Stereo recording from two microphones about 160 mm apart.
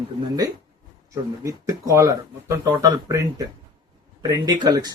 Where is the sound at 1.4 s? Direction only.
20° right (ahead or behind).